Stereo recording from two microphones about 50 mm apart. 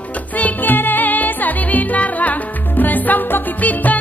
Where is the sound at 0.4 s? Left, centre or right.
Left.